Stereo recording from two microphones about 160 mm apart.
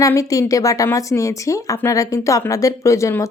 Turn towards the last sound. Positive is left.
turn(degrees=20)  # may be behind; listen again after turning